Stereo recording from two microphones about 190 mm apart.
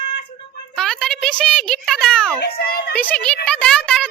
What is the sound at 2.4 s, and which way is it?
Speech, 50° left (ahead or behind).